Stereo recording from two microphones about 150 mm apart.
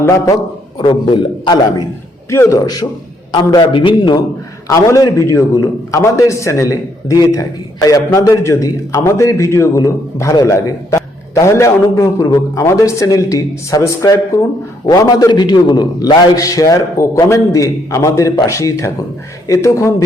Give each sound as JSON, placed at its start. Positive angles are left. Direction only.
{"t": 0.0, "sound": "a man's voice", "side_deg": 20}
{"t": 0.8, "sound": "a man's voice", "side_deg": 35}
{"t": 2.3, "sound": "a man's voice", "side_deg": 20}
{"t": 4.7, "sound": "a man's voice", "side_deg": 20}